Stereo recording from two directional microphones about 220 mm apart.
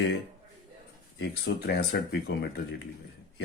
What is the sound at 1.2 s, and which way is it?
A man's voice, 50° left (ahead or behind).